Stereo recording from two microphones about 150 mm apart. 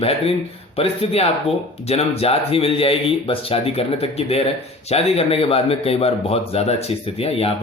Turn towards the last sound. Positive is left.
turn(degrees=40)  # may be behind; listen again after turning